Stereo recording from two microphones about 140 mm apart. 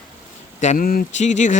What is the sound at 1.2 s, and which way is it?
Speech, 60° left (ahead or behind).